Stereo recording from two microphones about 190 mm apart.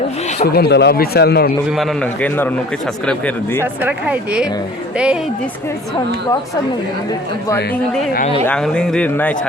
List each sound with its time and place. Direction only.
0.4 s a man's voice: 55° left (ahead or behind)
1.7 s a man's voice: centre (ahead or behind)
3.6 s a man's voice: 10° right (ahead or behind)
7.1 s a man's voice: 15° left (ahead or behind)